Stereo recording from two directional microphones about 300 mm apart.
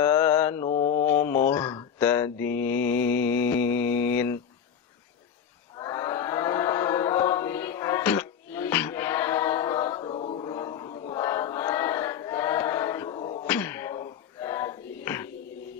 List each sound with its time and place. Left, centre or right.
0.0 s mantra: centre
0.7 s mantra: left
1.0 s mantra: centre
5.8 s chant: centre
13.5 s beatboxing: centre